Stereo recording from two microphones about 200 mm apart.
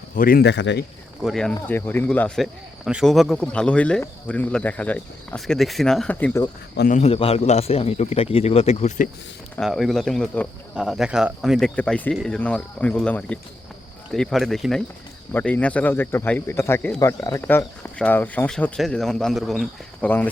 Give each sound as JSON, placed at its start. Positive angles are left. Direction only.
{"t": 0.1, "sound": "speech", "side_deg": 45}
{"t": 1.2, "sound": "speech", "side_deg": 0}
{"t": 6.7, "sound": "a man's voice", "side_deg": 40}
{"t": 9.6, "sound": "speech", "side_deg": 0}